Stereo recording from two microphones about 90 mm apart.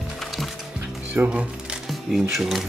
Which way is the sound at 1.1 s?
15° right (ahead or behind).